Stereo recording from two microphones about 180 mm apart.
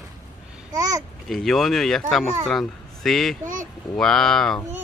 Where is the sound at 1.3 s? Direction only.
Centre (ahead or behind).